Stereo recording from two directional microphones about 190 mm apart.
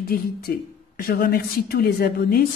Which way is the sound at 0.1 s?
50° left (ahead or behind).